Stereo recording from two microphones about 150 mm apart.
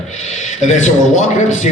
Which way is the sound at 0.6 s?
55° left (ahead or behind).